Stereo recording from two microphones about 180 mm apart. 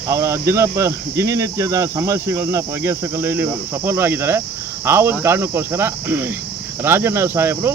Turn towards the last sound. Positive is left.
turn(degrees=-15)  # may be behind; listen again after turning